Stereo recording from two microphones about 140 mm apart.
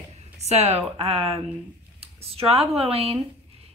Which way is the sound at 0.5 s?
50° right (ahead or behind).